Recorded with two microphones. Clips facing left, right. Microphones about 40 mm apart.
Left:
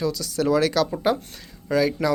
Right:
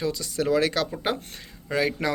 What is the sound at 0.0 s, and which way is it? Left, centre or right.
Speech, right.